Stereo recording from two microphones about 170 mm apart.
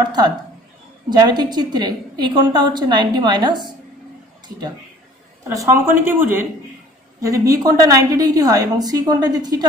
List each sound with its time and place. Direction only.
0.0 s a woman's voice: 25° right (ahead or behind)
5.5 s a woman's voice: 15° right (ahead or behind)